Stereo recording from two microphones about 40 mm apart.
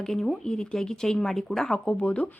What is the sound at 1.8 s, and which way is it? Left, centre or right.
Speech, left.